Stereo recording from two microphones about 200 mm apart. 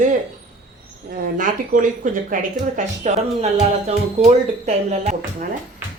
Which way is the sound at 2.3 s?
40° right (ahead or behind).